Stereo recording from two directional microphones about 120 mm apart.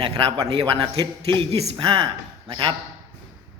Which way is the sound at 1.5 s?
60° right (ahead or behind).